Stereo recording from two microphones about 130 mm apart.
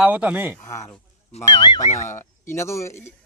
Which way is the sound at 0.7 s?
25° left (ahead or behind).